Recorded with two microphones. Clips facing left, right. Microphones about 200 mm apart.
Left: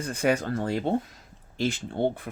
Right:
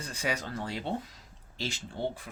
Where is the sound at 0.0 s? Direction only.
55° left (ahead or behind).